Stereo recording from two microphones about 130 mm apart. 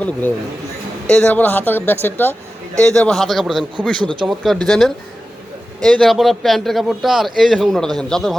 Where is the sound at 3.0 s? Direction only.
Centre (ahead or behind).